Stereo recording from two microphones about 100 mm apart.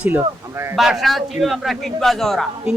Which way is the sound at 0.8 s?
Centre (ahead or behind).